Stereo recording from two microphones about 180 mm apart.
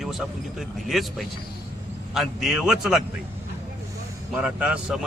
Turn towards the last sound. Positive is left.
turn(degrees=-5)  # may be behind; listen again after turning